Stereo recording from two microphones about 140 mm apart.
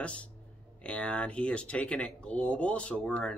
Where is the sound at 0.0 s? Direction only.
10° left (ahead or behind).